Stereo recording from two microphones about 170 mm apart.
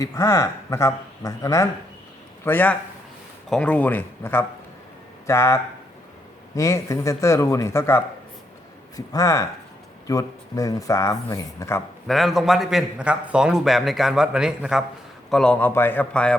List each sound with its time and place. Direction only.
0.0 s a man's voice: 20° left (ahead or behind)
6.6 s speech: 20° left (ahead or behind)
12.0 s a man's voice: centre (ahead or behind)